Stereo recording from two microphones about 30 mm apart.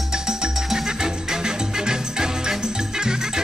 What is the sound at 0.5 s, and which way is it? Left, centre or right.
Music, centre.